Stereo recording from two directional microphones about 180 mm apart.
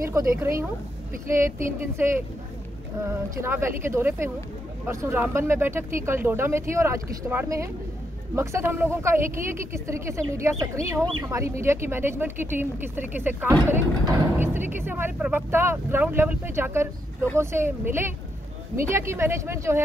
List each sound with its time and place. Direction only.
0.0 s speech: 15° right (ahead or behind)
3.1 s speech: 15° right (ahead or behind)